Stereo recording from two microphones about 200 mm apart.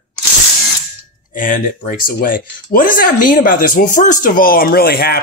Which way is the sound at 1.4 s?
40° left (ahead or behind).